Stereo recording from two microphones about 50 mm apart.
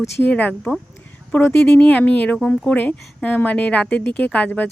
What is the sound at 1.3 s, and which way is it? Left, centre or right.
Speech, left.